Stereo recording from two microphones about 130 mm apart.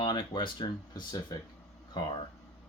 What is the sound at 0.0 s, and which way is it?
Speech, 35° left (ahead or behind).